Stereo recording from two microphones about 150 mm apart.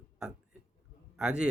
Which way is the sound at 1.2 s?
5° right (ahead or behind).